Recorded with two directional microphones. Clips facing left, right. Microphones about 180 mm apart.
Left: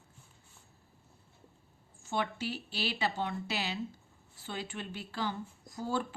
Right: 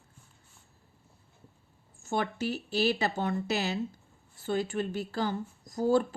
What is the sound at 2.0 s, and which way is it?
Speech, 45° right (ahead or behind).